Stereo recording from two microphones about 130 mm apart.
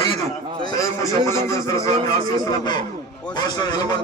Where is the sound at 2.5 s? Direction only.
35° left (ahead or behind).